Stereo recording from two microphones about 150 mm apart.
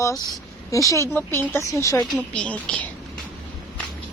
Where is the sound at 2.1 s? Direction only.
10° left (ahead or behind).